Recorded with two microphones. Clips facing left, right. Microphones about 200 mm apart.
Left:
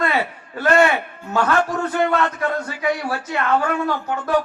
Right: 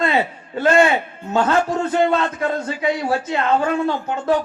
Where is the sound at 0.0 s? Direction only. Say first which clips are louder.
Right 2 dB; 25° right (ahead or behind).